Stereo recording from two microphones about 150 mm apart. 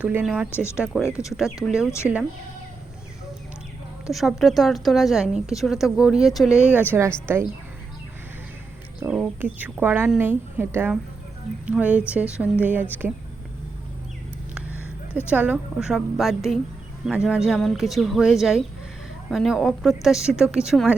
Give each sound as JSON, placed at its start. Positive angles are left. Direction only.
{"t": 0.0, "sound": "speech", "side_deg": -10}
{"t": 0.5, "sound": "speech", "side_deg": 15}
{"t": 0.8, "sound": "a woman's voice", "side_deg": -5}
{"t": 4.1, "sound": "a woman's voice", "side_deg": 0}
{"t": 9.0, "sound": "speech", "side_deg": -5}
{"t": 14.5, "sound": "a sound", "side_deg": -10}
{"t": 15.3, "sound": "a woman's voice", "side_deg": -10}